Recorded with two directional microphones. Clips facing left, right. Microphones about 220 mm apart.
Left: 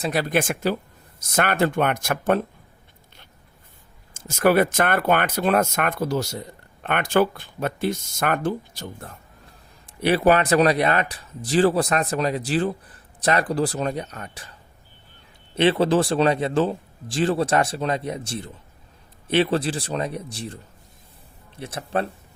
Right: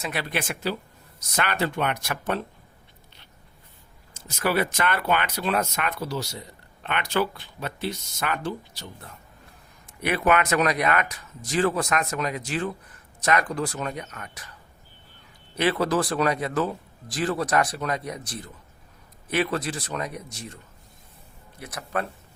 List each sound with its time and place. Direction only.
0.0 s speech: 40° left (ahead or behind)
4.1 s speech: 50° left (ahead or behind)
9.8 s speech: 30° left (ahead or behind)
15.5 s a man's voice: 25° left (ahead or behind)